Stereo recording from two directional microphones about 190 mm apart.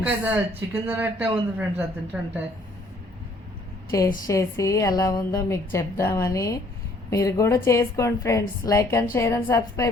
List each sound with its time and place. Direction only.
0.0 s a woman's voice: 10° right (ahead or behind)
4.3 s a woman's voice: 15° left (ahead or behind)